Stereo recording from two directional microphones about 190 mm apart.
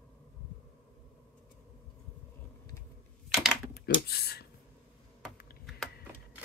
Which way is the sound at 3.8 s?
55° left (ahead or behind).